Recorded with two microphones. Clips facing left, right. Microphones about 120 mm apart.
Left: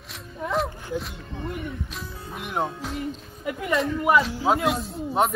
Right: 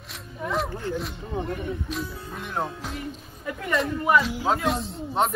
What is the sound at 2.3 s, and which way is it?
Speech, 15° left (ahead or behind).